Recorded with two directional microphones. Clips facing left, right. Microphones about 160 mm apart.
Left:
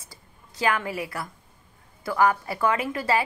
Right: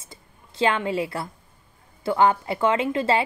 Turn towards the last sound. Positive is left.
turn(degrees=-25)  # may be behind; listen again after turning